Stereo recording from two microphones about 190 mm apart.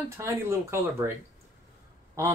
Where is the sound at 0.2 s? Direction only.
15° right (ahead or behind).